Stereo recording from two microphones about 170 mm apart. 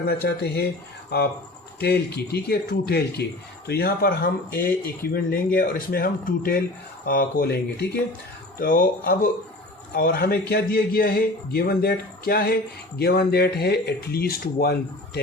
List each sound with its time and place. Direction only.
0.1 s speech: 70° left (ahead or behind)
1.8 s speech: 70° left (ahead or behind)
8.5 s speech: 55° left (ahead or behind)